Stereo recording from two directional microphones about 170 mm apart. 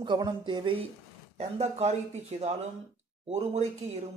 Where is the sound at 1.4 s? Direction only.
40° right (ahead or behind).